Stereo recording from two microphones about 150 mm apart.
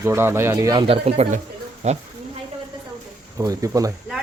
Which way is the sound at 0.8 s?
40° right (ahead or behind).